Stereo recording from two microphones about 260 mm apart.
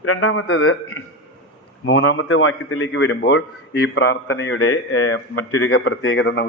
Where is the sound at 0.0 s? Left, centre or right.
Left.